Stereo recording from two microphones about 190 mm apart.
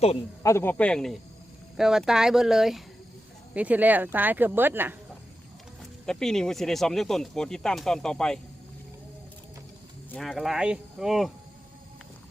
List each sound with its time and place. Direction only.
0.4 s speech: 15° left (ahead or behind); by 4.9 s 10° right (ahead or behind)
6.1 s speech: 5° left (ahead or behind)
10.1 s speech: centre (ahead or behind)